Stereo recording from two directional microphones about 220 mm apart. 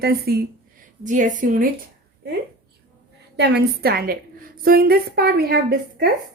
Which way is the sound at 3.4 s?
45° right (ahead or behind).